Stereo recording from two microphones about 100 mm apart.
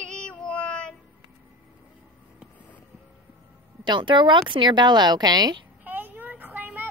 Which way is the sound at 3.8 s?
50° right (ahead or behind).